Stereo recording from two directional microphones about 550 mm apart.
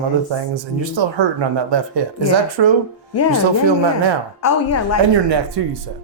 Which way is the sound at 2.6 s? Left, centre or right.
Right.